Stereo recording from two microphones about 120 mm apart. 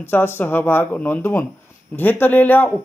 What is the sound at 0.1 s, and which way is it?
A man's voice, 15° left (ahead or behind).